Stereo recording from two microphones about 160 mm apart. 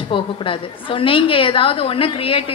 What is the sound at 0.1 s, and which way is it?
A woman's voice, 35° left (ahead or behind).